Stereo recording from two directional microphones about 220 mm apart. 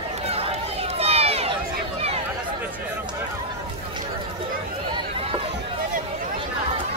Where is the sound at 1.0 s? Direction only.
25° right (ahead or behind).